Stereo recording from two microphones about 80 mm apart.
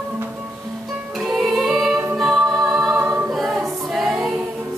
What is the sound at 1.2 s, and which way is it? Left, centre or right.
Music, centre.